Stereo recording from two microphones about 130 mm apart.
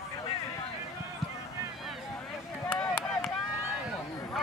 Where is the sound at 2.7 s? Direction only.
5° left (ahead or behind).